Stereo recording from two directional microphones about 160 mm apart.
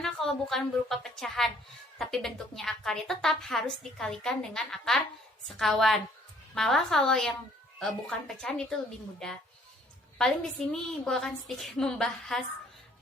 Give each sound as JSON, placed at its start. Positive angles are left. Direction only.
{"t": 0.0, "sound": "a woman's voice", "side_deg": 0}
{"t": 10.2, "sound": "a woman's voice", "side_deg": 5}